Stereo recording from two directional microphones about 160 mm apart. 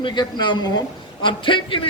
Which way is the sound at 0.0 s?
30° left (ahead or behind).